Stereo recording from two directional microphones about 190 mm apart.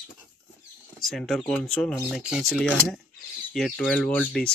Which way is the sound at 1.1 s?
Centre (ahead or behind).